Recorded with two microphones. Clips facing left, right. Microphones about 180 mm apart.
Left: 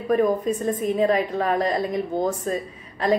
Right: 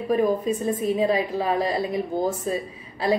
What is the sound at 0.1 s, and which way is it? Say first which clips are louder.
A woman's voice: left 1 dB; 10° right (ahead or behind).